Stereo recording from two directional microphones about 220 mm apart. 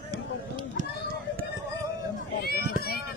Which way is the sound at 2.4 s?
45° left (ahead or behind).